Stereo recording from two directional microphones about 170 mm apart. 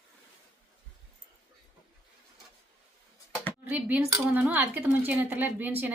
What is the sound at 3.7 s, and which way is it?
A woman's voice, 10° right (ahead or behind).